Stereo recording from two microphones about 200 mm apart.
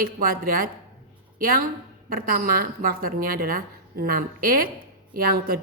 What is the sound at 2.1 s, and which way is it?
A woman's voice, 45° right (ahead or behind).